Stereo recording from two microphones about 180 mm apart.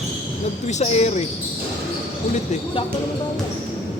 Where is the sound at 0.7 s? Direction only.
40° left (ahead or behind).